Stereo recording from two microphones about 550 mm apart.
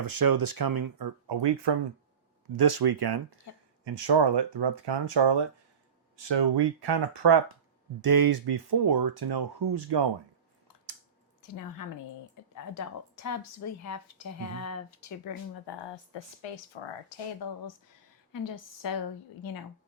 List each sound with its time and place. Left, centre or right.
0.0 s speech: right
12.7 s a woman's voice: left
16.1 s speech: left
18.3 s a woman's voice: left